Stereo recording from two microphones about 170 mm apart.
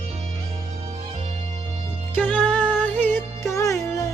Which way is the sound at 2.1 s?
10° left (ahead or behind).